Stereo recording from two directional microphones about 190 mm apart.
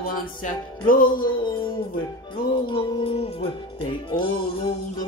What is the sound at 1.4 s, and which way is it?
Music, 25° left (ahead or behind).